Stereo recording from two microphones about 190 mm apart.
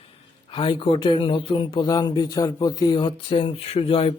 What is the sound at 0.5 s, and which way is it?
A man's voice, 25° left (ahead or behind).